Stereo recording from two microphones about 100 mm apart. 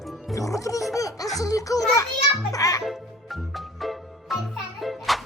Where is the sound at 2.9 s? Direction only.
Centre (ahead or behind).